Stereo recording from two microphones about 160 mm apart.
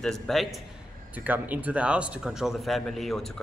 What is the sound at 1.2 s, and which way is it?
Speech, 10° right (ahead or behind).